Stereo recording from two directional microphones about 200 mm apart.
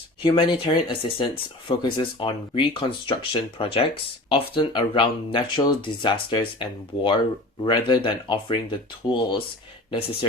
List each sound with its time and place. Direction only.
0.2 s speech: 25° left (ahead or behind)